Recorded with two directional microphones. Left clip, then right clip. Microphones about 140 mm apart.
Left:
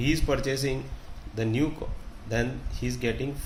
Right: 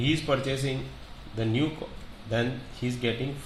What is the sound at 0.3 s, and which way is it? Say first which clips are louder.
Speech: even; 30° left (ahead or behind).